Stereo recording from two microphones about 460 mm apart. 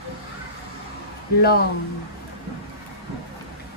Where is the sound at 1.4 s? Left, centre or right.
Centre.